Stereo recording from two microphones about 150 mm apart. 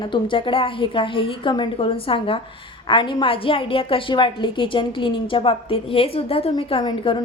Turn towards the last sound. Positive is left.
turn(degrees=30)  # may be behind; listen again after turning